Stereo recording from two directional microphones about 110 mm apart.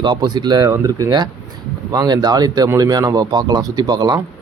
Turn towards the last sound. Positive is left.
turn(degrees=-40)  # may be behind; listen again after turning